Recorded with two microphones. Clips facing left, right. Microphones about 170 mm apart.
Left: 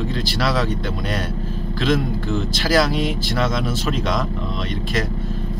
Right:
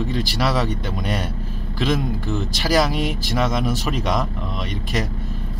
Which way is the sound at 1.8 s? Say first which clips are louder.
Left 1 dB; 10° right (ahead or behind).